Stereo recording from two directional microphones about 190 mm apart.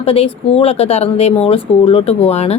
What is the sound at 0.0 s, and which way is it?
Speech, 30° left (ahead or behind).